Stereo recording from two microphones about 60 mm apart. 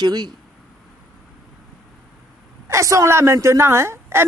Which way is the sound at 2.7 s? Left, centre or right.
Right.